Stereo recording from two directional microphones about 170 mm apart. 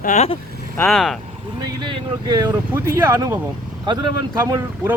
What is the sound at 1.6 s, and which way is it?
Speech, 25° right (ahead or behind).